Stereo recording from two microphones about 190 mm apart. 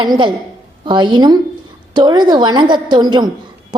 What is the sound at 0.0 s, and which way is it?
A woman's voice, 25° right (ahead or behind).